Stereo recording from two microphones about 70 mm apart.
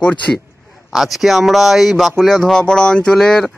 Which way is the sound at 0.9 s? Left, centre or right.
Centre.